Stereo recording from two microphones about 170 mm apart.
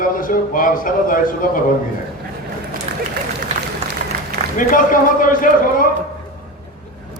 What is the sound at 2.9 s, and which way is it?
Run, 40° right (ahead or behind).